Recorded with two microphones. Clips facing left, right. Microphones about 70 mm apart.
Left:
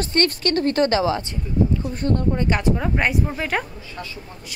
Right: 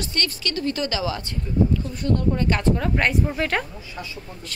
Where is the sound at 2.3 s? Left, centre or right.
Centre.